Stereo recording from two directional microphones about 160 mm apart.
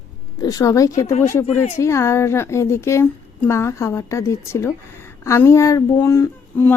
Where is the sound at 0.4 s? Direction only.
20° left (ahead or behind).